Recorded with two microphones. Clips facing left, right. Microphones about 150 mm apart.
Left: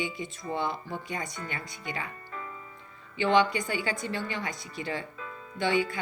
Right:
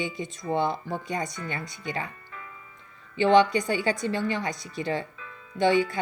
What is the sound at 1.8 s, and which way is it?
Speech, 25° right (ahead or behind).